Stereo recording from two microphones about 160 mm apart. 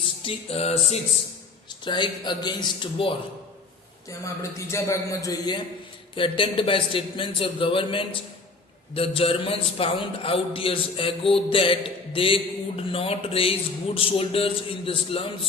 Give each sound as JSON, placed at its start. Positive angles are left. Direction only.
{"t": 0.3, "sound": "a man's voice", "side_deg": 40}
{"t": 1.8, "sound": "speech", "side_deg": 30}
{"t": 4.1, "sound": "a man's voice", "side_deg": 20}